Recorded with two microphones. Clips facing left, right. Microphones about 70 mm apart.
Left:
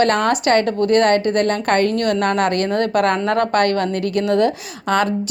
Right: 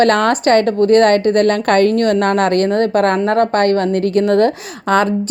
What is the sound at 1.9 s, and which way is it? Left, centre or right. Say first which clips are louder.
A woman's voice: right 4 dB; right.